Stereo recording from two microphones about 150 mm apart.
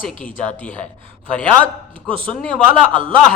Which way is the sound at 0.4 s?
10° left (ahead or behind).